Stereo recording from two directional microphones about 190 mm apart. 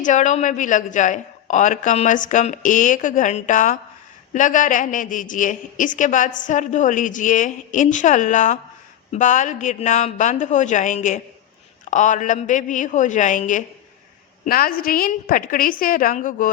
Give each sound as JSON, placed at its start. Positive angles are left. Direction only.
{"t": 0.0, "sound": "a woman's voice", "side_deg": 40}